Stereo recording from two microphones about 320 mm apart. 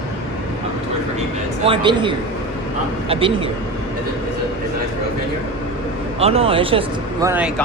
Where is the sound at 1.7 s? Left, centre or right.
Centre.